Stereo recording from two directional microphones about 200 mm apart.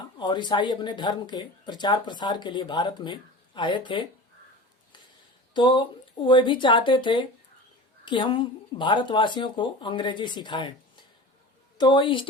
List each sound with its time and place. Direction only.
0.2 s speech: 20° left (ahead or behind)
5.5 s speech: 25° left (ahead or behind)